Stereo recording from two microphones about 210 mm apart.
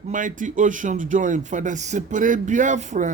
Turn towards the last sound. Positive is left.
turn(degrees=-35)  # may be behind; listen again after turning